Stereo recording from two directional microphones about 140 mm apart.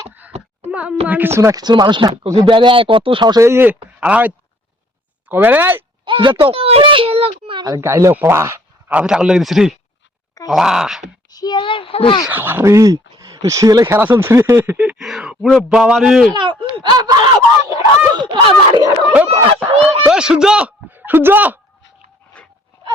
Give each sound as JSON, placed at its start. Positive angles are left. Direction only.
{"t": 0.1, "sound": "a sound", "side_deg": -10}
{"t": 0.7, "sound": "speech", "side_deg": -10}
{"t": 3.4, "sound": "speech", "side_deg": -15}
{"t": 5.3, "sound": "speech", "side_deg": -15}
{"t": 6.1, "sound": "speech", "side_deg": -35}
{"t": 7.8, "sound": "speech", "side_deg": -20}
{"t": 9.0, "sound": "a man's voice", "side_deg": -5}
{"t": 11.3, "sound": "speech", "side_deg": 30}
{"t": 12.3, "sound": "a man's voice", "side_deg": -15}
{"t": 16.3, "sound": "speech", "side_deg": -35}
{"t": 19.1, "sound": "speech", "side_deg": -10}
{"t": 22.3, "sound": "a sound", "side_deg": 10}